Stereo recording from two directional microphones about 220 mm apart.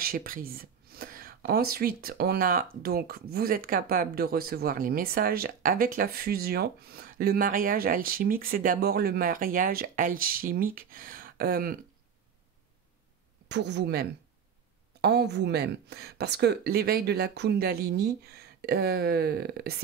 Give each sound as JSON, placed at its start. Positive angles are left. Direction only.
{"t": 0.0, "sound": "speech", "side_deg": -40}
{"t": 13.5, "sound": "speech", "side_deg": -50}